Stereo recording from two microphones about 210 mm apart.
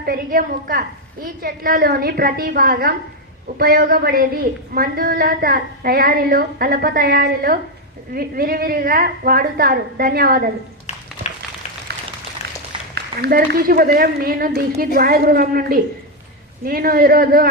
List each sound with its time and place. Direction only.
0.0 s a woman's voice: 45° right (ahead or behind)
12.9 s a woman's voice: 50° right (ahead or behind)